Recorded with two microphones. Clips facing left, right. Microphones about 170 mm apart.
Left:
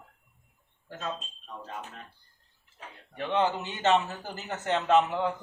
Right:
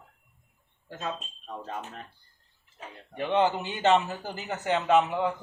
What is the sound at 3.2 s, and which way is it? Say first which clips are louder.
A man's voice: right 2 dB; 15° right (ahead or behind).